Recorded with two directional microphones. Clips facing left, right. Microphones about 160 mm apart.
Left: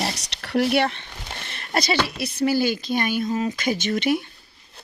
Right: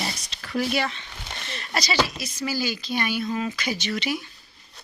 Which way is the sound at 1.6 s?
55° left (ahead or behind).